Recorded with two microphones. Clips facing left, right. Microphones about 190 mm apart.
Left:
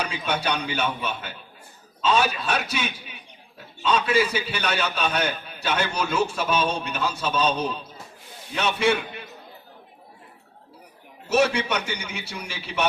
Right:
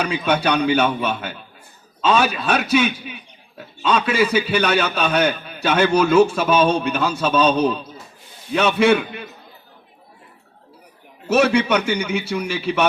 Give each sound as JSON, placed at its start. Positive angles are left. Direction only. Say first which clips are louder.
{"t": 0.0, "sound": "a man's voice", "louder": "right 7 dB", "side_deg": -70}
{"t": 8.5, "sound": "a man's voice", "louder": "right 7 dB", "side_deg": -75}
{"t": 11.3, "sound": "a man's voice", "louder": "right 5 dB", "side_deg": -65}